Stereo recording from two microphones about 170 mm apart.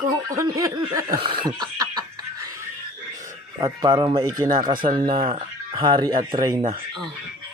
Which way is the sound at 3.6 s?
25° right (ahead or behind).